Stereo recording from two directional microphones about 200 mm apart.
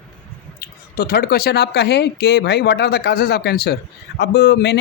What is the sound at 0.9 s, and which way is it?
Speech, 50° left (ahead or behind).